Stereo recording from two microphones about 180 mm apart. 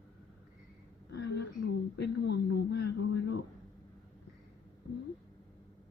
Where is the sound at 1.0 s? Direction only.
70° left (ahead or behind).